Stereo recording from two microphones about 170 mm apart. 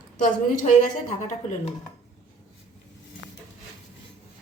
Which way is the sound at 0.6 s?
45° left (ahead or behind).